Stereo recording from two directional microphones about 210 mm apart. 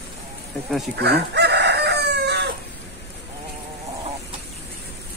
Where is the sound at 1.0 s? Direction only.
50° right (ahead or behind).